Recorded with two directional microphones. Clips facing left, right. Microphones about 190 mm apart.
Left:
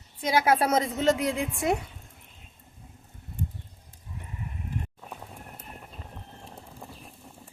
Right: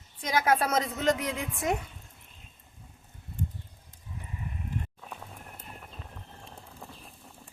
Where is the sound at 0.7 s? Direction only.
30° left (ahead or behind).